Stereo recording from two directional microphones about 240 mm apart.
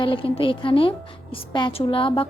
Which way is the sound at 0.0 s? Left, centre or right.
Left.